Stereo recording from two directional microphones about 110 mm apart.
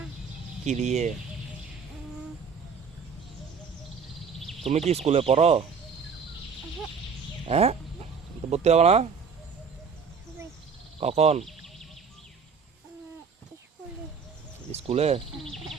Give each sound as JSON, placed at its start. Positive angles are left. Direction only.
{"t": 0.6, "sound": "speech", "side_deg": -90}
{"t": 4.9, "sound": "speech", "side_deg": -70}
{"t": 7.4, "sound": "speech", "side_deg": -65}
{"t": 11.0, "sound": "speech", "side_deg": -70}
{"t": 11.4, "sound": "a sound", "side_deg": 5}
{"t": 14.7, "sound": "speech", "side_deg": -70}